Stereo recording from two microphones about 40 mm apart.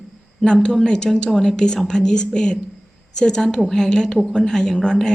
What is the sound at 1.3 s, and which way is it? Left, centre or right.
Speech, centre.